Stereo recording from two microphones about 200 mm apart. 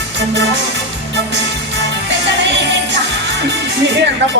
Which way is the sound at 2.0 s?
60° right (ahead or behind).